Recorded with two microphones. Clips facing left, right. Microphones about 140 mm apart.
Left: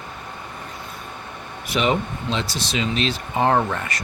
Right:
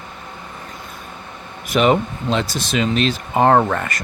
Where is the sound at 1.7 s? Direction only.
50° right (ahead or behind).